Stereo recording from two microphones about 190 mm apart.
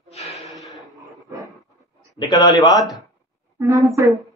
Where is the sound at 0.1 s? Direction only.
35° left (ahead or behind).